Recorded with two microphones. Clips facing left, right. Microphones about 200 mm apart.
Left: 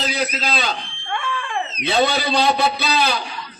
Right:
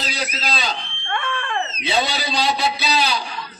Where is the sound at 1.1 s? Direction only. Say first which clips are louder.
Even; 10° left (ahead or behind).